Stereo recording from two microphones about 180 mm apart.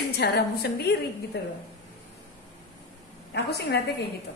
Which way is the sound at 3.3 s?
70° left (ahead or behind).